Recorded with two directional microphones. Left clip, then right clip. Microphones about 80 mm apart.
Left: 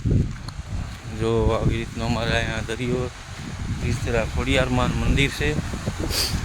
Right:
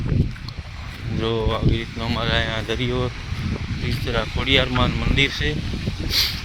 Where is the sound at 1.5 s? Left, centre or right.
Left.